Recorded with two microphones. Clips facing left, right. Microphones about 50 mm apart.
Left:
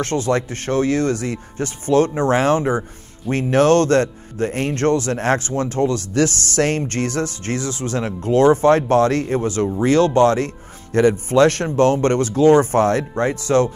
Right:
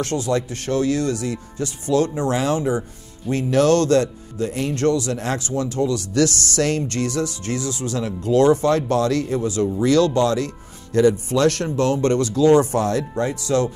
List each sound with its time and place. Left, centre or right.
0.0 s speech: left
9.7 s speech: left